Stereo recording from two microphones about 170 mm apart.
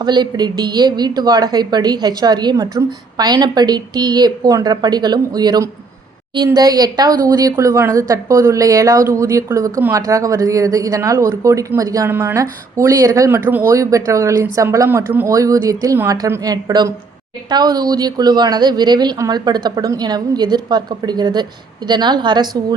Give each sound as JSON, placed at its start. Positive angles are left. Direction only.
{"t": 0.0, "sound": "a woman's voice", "side_deg": -25}